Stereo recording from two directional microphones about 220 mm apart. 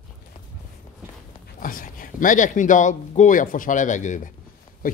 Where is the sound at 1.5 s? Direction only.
40° left (ahead or behind).